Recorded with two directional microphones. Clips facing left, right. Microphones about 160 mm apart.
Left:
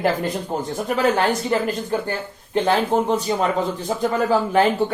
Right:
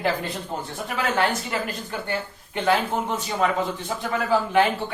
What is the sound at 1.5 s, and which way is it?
Speech, 35° left (ahead or behind).